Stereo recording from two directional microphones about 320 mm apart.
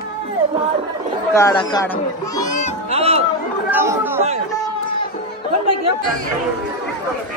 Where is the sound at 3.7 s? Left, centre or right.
Centre.